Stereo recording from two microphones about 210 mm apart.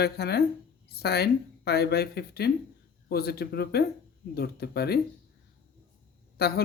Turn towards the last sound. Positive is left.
turn(degrees=50)  # may be behind; listen again after turning